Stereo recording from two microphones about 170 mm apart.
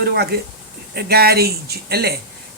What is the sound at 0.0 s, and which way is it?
Speech, 70° right (ahead or behind).